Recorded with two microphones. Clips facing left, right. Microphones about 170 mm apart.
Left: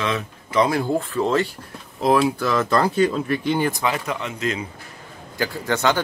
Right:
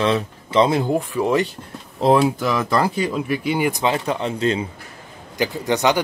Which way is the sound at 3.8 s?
30° right (ahead or behind).